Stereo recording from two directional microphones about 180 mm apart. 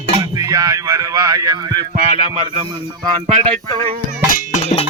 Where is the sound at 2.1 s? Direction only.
40° right (ahead or behind).